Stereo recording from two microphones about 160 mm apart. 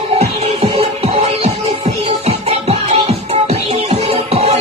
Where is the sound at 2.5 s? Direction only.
40° right (ahead or behind).